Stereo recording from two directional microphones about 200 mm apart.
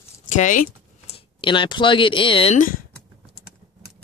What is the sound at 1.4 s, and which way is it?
Speech, 25° left (ahead or behind).